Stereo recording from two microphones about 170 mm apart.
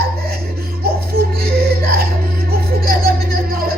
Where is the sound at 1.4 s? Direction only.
65° right (ahead or behind).